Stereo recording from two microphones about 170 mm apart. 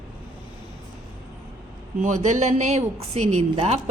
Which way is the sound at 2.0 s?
45° right (ahead or behind).